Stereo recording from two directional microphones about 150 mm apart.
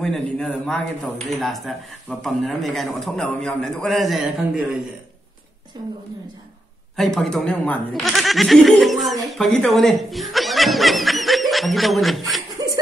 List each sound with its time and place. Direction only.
0.0 s speech: 5° left (ahead or behind)
5.7 s a woman's voice: 30° right (ahead or behind)
7.0 s speech: centre (ahead or behind)
12.6 s a sound: 25° right (ahead or behind)